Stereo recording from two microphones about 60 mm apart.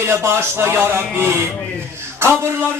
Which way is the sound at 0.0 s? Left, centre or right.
Right.